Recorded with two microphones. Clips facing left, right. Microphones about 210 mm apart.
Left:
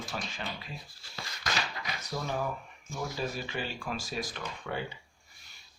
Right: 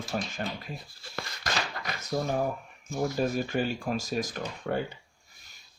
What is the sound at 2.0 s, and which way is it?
Speech, 45° right (ahead or behind).